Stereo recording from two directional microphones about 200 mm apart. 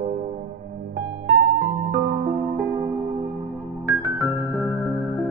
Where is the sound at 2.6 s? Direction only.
10° right (ahead or behind).